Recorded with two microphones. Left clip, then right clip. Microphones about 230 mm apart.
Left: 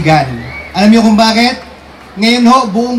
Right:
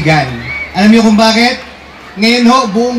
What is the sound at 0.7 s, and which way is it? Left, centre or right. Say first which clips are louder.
A man's voice: even; right.